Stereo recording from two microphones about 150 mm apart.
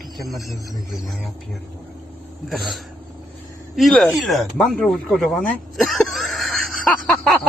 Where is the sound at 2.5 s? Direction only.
Centre (ahead or behind).